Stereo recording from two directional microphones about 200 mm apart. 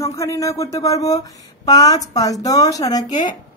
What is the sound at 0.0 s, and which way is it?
Speech, 15° left (ahead or behind).